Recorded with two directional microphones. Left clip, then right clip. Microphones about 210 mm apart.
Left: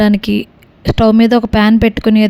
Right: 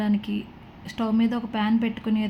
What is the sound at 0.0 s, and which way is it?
Speech, 55° left (ahead or behind).